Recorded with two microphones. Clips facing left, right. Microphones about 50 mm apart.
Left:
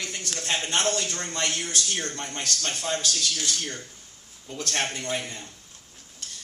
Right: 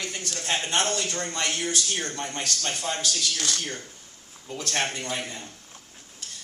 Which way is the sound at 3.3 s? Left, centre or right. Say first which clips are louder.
Right 1 dB; right.